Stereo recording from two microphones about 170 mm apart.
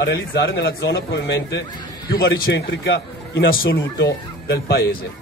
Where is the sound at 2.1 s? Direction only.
75° left (ahead or behind).